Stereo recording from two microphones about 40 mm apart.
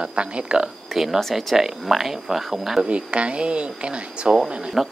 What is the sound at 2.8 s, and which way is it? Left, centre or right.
Speech, right.